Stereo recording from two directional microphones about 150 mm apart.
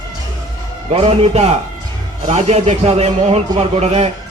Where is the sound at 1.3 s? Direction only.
45° right (ahead or behind).